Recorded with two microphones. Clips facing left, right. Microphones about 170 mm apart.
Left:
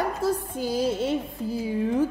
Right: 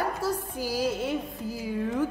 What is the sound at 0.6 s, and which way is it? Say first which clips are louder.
A woman's voice: left 2 dB; 25° left (ahead or behind).